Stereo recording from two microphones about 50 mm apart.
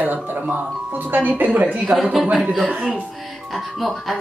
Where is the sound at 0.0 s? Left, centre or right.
Right.